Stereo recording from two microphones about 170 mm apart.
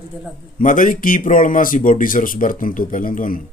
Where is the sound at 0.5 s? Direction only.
50° left (ahead or behind).